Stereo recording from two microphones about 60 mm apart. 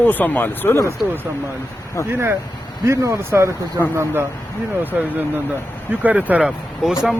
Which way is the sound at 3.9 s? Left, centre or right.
Right.